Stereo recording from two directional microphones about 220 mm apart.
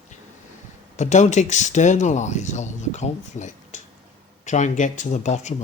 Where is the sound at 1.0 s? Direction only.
30° left (ahead or behind).